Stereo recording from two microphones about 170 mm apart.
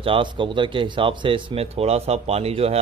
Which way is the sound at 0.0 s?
30° right (ahead or behind).